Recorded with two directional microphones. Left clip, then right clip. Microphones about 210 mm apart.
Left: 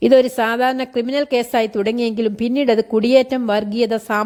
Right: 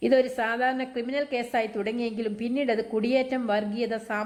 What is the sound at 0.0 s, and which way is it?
Speech, 50° left (ahead or behind).